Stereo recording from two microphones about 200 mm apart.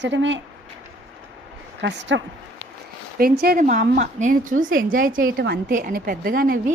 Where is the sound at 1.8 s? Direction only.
60° right (ahead or behind).